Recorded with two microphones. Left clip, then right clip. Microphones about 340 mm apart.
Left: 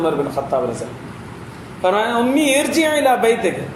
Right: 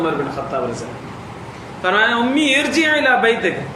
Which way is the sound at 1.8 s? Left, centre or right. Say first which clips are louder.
Right 1 dB; centre.